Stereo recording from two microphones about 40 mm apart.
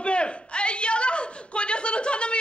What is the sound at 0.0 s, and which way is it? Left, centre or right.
A woman's voice, left.